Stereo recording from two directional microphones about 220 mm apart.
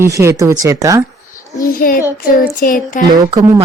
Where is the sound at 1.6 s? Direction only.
40° left (ahead or behind).